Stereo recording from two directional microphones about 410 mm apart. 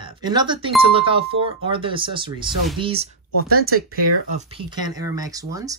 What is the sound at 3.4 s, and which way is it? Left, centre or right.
Speech, right.